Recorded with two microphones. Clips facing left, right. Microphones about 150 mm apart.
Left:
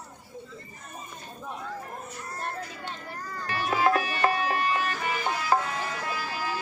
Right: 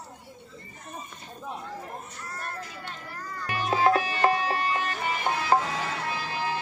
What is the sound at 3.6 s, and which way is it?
Music, 30° right (ahead or behind).